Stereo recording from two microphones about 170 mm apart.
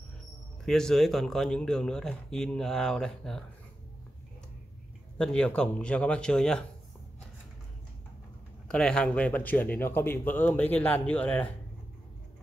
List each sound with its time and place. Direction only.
0.7 s speech: centre (ahead or behind)
5.1 s speech: 5° left (ahead or behind)
8.6 s speech: 5° left (ahead or behind)